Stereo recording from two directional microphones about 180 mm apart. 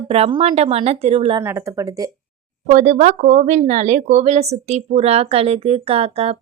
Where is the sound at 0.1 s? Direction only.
30° right (ahead or behind).